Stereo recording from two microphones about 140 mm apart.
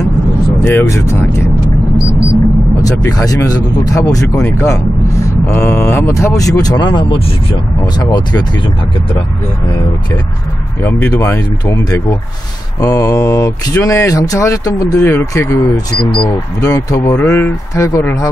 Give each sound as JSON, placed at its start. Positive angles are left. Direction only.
{"t": 0.7, "sound": "speech", "side_deg": 20}
{"t": 2.8, "sound": "speech", "side_deg": 25}
{"t": 10.8, "sound": "speech", "side_deg": 15}